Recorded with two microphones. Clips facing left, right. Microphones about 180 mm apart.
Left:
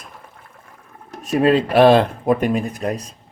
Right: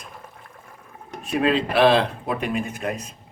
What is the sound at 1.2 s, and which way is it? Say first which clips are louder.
Speech: left 5 dB; 40° left (ahead or behind).